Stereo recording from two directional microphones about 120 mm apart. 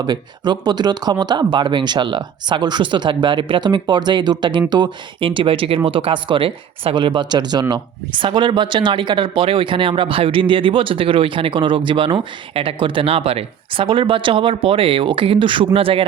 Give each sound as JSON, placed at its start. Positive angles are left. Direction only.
{"t": 0.0, "sound": "speech", "side_deg": -35}